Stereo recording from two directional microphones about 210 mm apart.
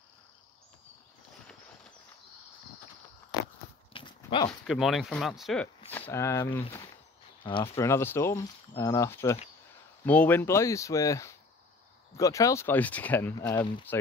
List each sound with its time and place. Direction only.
3.9 s dog: 25° left (ahead or behind)
4.5 s speech: centre (ahead or behind); by 7.7 s 25° left (ahead or behind)
7.7 s speech: 15° left (ahead or behind)